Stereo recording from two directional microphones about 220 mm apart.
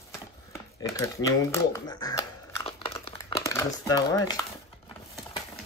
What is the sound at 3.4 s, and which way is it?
Speech, 15° left (ahead or behind).